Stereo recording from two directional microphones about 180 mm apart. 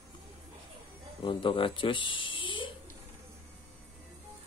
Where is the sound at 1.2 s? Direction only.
25° left (ahead or behind).